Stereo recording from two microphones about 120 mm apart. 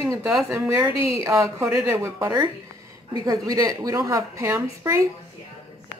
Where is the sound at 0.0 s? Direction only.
25° right (ahead or behind).